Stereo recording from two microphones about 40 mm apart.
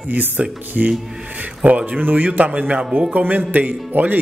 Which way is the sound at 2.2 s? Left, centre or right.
Right.